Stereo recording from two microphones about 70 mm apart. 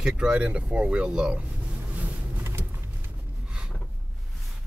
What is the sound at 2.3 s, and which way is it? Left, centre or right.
Vehicle, right.